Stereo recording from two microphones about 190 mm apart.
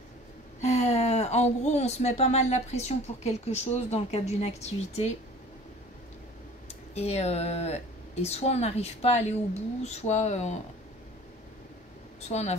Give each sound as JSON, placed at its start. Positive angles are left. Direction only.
{"t": 0.6, "sound": "speech", "side_deg": 35}
{"t": 7.0, "sound": "speech", "side_deg": 35}
{"t": 12.3, "sound": "speech", "side_deg": 35}